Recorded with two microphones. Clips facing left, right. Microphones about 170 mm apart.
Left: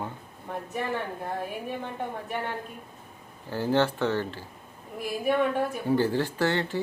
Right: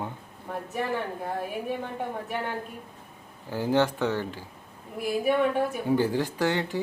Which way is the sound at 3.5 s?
15° right (ahead or behind).